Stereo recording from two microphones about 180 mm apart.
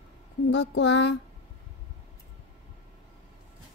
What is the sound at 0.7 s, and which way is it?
Speech, 80° left.